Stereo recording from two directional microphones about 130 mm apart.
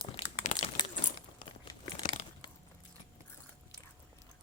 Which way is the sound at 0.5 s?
85° left.